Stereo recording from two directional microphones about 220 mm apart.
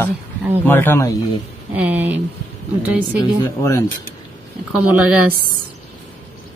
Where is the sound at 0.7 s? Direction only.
10° left (ahead or behind).